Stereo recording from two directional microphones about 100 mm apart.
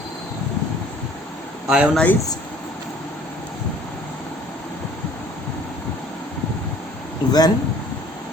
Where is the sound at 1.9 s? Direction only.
15° left (ahead or behind).